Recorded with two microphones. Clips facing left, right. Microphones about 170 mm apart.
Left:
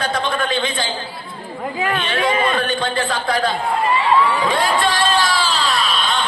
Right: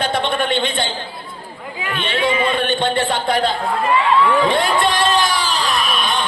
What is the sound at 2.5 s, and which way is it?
Speech, 25° right (ahead or behind).